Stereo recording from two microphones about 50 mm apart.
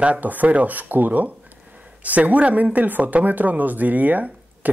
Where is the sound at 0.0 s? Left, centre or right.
Right.